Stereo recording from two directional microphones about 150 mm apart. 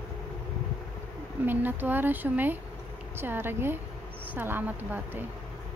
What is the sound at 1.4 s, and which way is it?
A woman's voice, 15° right (ahead or behind).